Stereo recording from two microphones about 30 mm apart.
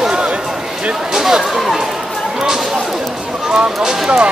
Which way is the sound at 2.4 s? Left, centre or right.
Centre.